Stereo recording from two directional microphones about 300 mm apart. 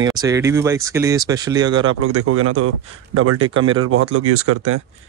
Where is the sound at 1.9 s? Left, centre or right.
Right.